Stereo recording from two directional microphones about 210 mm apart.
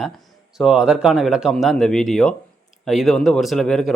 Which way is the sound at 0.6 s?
5° right (ahead or behind).